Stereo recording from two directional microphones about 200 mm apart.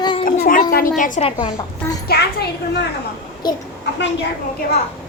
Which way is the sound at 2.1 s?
55° left (ahead or behind).